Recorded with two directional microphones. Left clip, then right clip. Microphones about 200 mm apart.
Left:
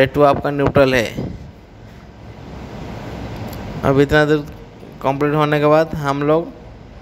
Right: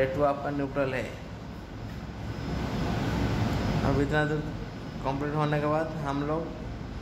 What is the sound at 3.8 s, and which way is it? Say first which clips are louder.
A man's voice: left 15 dB; 45° left (ahead or behind).